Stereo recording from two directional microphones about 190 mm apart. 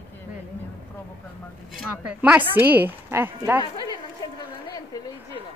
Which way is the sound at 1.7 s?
5° right (ahead or behind).